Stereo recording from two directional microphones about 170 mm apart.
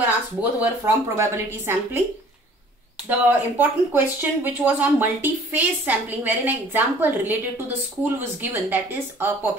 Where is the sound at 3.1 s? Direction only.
10° right (ahead or behind).